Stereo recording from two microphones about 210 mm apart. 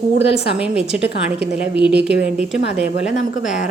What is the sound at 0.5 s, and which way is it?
A woman's voice, 5° right (ahead or behind).